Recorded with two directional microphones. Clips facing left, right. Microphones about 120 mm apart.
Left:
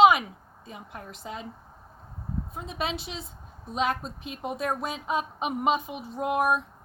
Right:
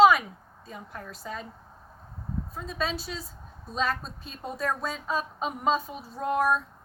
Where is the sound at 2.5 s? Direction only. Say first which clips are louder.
Right 1 dB; 20° left (ahead or behind).